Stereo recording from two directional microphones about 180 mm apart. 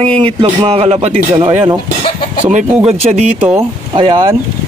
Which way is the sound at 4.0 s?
25° right (ahead or behind).